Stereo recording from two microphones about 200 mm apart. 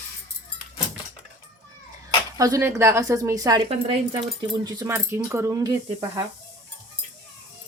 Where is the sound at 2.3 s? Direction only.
15° right (ahead or behind).